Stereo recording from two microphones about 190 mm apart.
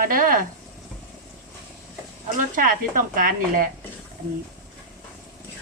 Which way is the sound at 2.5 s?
45° right (ahead or behind).